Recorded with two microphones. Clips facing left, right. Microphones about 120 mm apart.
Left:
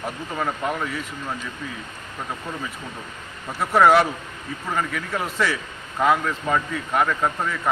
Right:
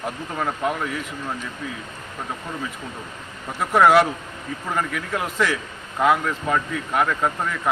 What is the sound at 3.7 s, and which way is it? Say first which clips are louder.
Speech: right 1 dB; centre (ahead or behind).